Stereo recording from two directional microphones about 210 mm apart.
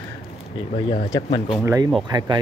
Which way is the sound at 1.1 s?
25° left (ahead or behind).